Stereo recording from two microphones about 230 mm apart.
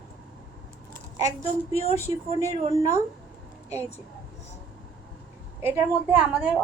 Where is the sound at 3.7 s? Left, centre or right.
Left.